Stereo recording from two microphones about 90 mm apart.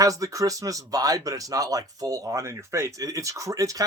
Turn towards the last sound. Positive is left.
turn(degrees=-40)  # may be behind; listen again after turning